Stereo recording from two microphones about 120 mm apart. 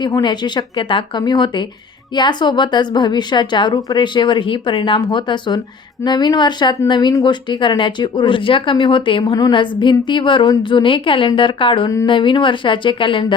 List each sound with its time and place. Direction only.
0.0 s speech: 40° left (ahead or behind)